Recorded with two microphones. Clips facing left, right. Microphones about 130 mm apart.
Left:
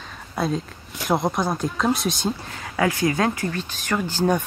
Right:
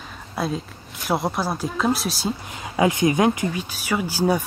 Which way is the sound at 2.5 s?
20° right (ahead or behind).